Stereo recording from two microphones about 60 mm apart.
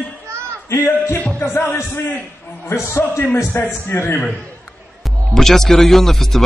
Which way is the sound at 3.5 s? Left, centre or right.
Left.